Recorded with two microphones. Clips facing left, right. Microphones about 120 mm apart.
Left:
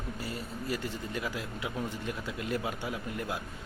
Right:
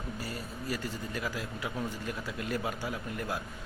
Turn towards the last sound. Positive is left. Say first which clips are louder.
# even
turn(degrees=20)  # may be behind; listen again after turning